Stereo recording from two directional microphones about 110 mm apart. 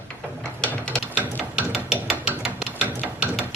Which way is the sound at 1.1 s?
10° right (ahead or behind).